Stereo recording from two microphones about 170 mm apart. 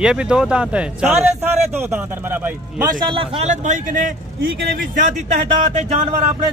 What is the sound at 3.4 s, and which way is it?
A man's voice, 45° right (ahead or behind).